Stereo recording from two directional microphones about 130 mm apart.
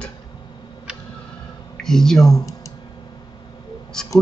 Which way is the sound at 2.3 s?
25° left (ahead or behind).